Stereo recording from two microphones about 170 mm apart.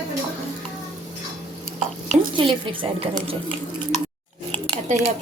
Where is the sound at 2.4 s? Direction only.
30° right (ahead or behind).